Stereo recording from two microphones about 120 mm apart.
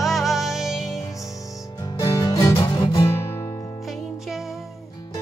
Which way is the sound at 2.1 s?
30° left (ahead or behind).